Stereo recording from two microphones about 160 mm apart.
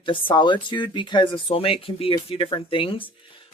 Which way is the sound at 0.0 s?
30° left (ahead or behind).